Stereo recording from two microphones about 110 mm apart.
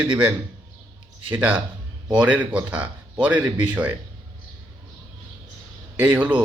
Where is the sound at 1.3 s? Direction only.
15° right (ahead or behind).